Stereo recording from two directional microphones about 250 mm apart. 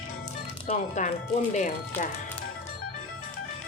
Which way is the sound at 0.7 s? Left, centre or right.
Left.